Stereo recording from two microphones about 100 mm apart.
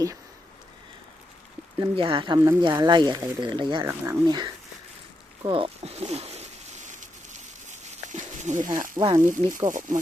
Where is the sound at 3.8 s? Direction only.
30° right (ahead or behind).